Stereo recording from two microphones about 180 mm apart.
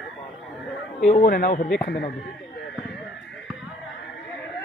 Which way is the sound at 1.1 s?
55° left (ahead or behind).